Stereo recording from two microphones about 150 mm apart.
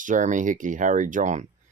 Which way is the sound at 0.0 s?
55° right (ahead or behind).